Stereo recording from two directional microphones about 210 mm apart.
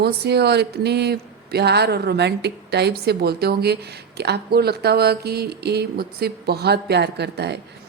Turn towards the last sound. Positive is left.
turn(degrees=-55)  # may be behind; listen again after turning